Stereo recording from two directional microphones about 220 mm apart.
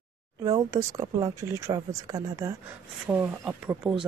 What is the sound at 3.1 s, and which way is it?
Speech, 5° right (ahead or behind).